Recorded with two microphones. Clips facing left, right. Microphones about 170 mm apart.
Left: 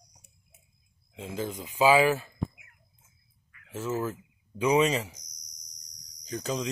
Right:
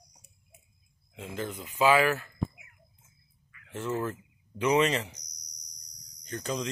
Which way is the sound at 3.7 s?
5° left (ahead or behind).